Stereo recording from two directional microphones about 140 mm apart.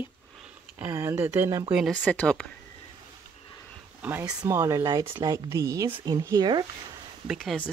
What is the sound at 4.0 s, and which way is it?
Speech, 15° right (ahead or behind).